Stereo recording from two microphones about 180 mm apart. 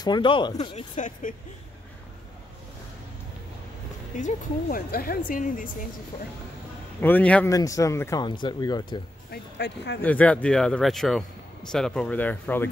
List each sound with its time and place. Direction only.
0.0 s speech: 25° left (ahead or behind)
0.9 s speech: 45° left (ahead or behind)
4.2 s speech: 45° left (ahead or behind)
7.0 s a man's voice: 10° left (ahead or behind)
7.5 s speech: 20° left (ahead or behind)
9.3 s speech: 75° left (ahead or behind)
10.0 s speech: 10° left (ahead or behind)